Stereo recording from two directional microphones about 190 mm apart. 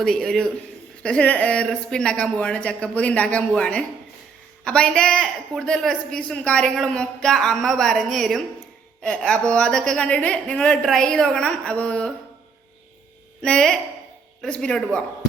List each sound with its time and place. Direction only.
0.0 s a woman's voice: centre (ahead or behind)
13.4 s a woman's voice: 5° left (ahead or behind)